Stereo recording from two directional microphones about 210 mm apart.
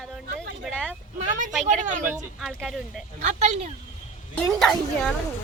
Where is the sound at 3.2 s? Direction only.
35° right (ahead or behind).